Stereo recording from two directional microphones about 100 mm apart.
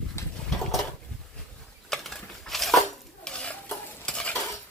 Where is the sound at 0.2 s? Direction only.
25° left (ahead or behind).